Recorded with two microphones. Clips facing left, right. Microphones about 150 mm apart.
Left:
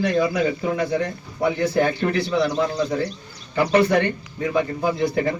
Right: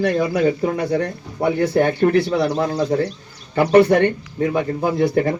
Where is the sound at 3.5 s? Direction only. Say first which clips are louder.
Right 5 dB; 55° right (ahead or behind).